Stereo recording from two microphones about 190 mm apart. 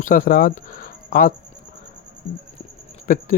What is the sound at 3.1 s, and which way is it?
Speech, 45° left (ahead or behind).